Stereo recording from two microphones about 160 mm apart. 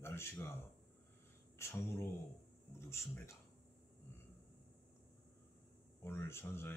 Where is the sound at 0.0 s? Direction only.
15° left (ahead or behind).